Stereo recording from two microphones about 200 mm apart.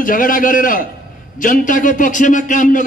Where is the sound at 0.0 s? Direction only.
45° left (ahead or behind).